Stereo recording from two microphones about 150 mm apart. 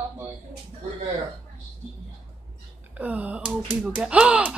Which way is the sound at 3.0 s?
10° right (ahead or behind).